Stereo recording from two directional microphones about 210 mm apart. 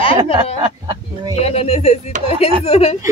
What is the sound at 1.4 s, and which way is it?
Speech, 30° left (ahead or behind).